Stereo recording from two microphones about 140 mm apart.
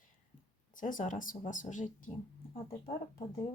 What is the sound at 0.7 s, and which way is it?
Speech, 70° left (ahead or behind).